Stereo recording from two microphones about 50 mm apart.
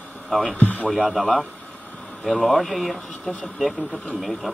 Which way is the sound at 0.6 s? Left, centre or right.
Left.